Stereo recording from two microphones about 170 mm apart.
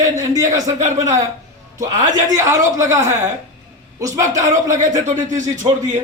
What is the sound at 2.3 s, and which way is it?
A man's voice, 20° right (ahead or behind).